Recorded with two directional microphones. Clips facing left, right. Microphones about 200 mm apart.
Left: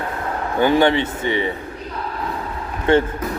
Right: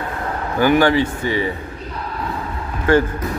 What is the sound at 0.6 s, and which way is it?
Speech, 25° left (ahead or behind).